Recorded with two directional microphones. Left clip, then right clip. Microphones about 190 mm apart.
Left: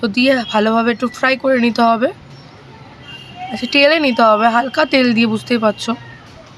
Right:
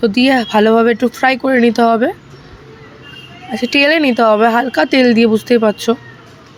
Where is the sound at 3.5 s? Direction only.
15° right (ahead or behind).